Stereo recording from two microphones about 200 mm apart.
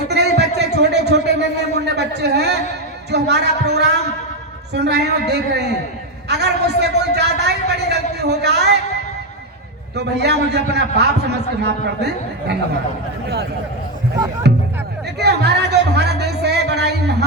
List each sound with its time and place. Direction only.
0.1 s a sound: 55° right (ahead or behind)
3.1 s a man's voice: 55° right (ahead or behind)
9.9 s a man's voice: 55° right (ahead or behind)
15.2 s music: 55° right (ahead or behind)